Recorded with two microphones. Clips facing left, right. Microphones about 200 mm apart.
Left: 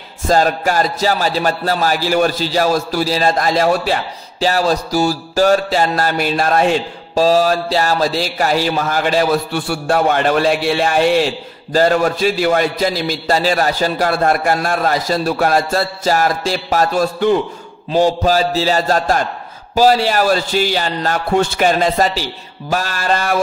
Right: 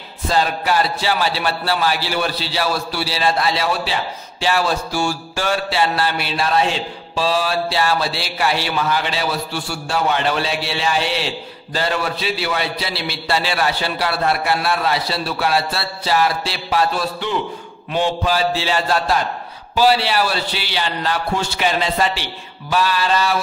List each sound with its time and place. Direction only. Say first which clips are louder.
0.3 s music: left 4 dB; 45° left (ahead or behind)
17.9 s a man's voice: left 6 dB; 40° left (ahead or behind)
19.7 s music: left 4 dB; 45° left (ahead or behind)